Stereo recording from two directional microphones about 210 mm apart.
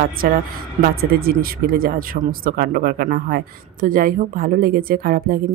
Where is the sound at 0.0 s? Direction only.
40° right (ahead or behind).